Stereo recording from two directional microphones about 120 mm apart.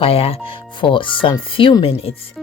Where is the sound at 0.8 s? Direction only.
45° left (ahead or behind).